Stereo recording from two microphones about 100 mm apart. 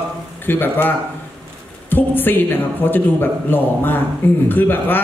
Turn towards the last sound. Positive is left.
turn(degrees=20)  # may be behind; listen again after turning